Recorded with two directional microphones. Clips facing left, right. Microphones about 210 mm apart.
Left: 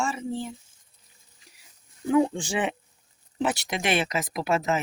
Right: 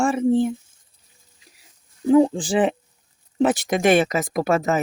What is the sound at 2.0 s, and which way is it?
Speech, 35° right (ahead or behind).